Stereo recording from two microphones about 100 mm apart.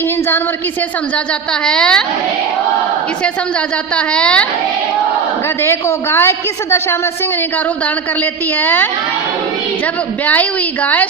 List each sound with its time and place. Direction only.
1.6 s a woman's voice: 10° left (ahead or behind)
3.9 s a woman's voice: 10° left (ahead or behind)
5.6 s a woman's voice: 25° left (ahead or behind)
8.6 s a woman's voice: 20° left (ahead or behind)
10.8 s a woman's voice: 15° left (ahead or behind)